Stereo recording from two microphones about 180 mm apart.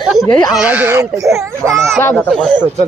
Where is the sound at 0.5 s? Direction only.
5° right (ahead or behind).